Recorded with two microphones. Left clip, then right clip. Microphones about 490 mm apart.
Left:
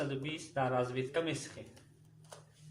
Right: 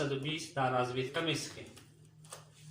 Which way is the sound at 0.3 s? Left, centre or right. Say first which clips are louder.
Right 1 dB; left.